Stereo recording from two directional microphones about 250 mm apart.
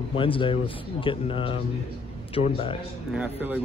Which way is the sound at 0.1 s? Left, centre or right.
Left.